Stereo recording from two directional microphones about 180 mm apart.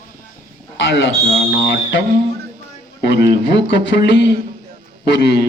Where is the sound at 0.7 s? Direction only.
75° left (ahead or behind).